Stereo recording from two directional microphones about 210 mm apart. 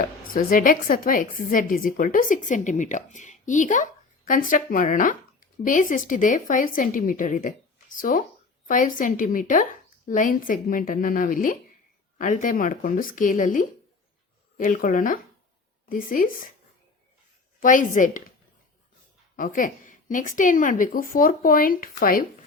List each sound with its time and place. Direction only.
0.3 s a woman's voice: 40° left (ahead or behind)
17.6 s a woman's voice: 40° left (ahead or behind)
19.4 s a woman's voice: 40° left (ahead or behind)